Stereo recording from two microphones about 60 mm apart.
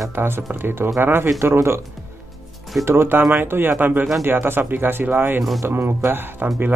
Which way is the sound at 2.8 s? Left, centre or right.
Right.